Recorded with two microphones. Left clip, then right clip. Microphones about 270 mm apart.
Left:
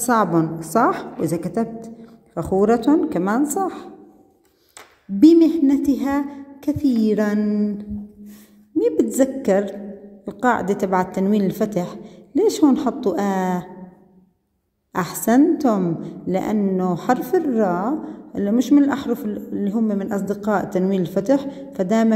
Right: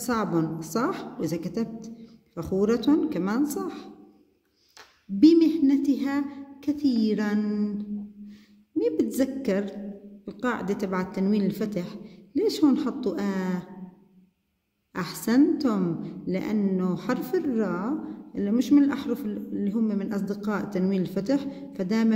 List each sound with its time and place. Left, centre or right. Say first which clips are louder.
0.0 s a woman's voice: left 9 dB; centre
5.2 s a woman's voice: left 6 dB; centre
14.9 s a woman's voice: left 9 dB; centre